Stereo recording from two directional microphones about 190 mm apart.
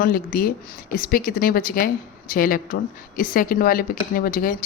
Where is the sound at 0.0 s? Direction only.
50° left (ahead or behind).